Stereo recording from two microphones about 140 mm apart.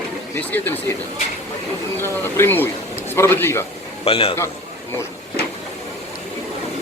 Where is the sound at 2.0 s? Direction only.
15° left (ahead or behind).